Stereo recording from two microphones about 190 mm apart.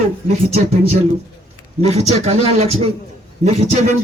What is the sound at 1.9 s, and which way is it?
A man's voice, 35° right (ahead or behind).